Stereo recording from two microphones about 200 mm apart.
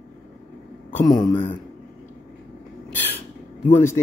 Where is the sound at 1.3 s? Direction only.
10° left (ahead or behind).